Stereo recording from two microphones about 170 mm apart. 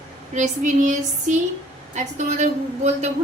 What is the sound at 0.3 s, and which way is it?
A woman's voice, 45° right (ahead or behind).